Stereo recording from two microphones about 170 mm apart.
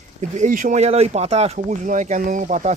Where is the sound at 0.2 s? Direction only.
45° right (ahead or behind).